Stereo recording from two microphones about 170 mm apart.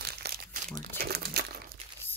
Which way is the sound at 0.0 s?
70° right (ahead or behind).